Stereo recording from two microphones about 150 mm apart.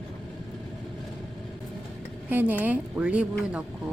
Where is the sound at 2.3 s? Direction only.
10° right (ahead or behind).